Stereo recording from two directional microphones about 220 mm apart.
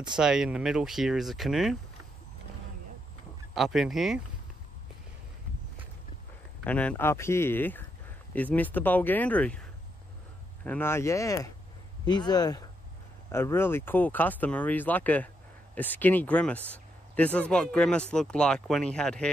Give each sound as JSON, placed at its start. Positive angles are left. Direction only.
{"t": 0.2, "sound": "speech", "side_deg": -5}
{"t": 3.5, "sound": "speech", "side_deg": 0}
{"t": 6.6, "sound": "speech", "side_deg": 5}